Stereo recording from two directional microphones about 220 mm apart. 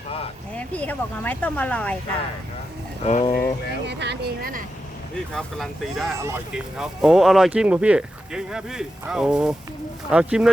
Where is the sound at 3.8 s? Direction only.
50° right (ahead or behind).